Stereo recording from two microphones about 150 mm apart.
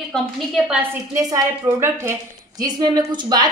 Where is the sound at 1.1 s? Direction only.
20° right (ahead or behind).